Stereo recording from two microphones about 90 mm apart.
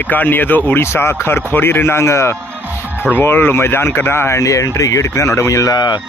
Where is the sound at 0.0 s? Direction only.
20° left (ahead or behind).